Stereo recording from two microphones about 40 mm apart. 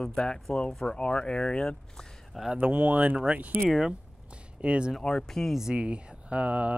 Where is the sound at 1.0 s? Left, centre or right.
Left.